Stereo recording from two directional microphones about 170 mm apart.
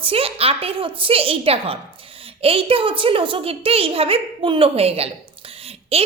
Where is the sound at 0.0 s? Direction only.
35° right (ahead or behind).